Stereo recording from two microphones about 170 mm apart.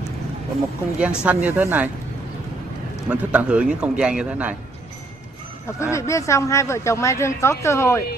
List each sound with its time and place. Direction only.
0.9 s a man's voice: 5° right (ahead or behind)
3.1 s a man's voice: 5° right (ahead or behind)
5.8 s speech: 15° left (ahead or behind)